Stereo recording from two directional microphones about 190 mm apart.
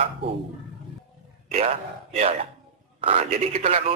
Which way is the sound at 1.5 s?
35° right (ahead or behind).